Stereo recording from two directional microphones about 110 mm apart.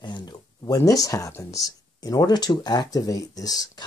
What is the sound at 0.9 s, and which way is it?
Speech, 30° left (ahead or behind).